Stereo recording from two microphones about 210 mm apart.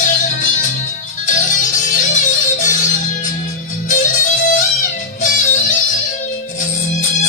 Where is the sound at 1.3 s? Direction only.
40° left (ahead or behind).